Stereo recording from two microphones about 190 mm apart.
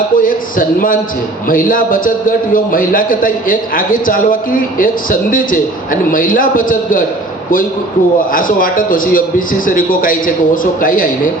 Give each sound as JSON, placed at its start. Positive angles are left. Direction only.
{"t": 0.2, "sound": "a man's voice", "side_deg": 45}
{"t": 8.3, "sound": "a man's voice", "side_deg": 45}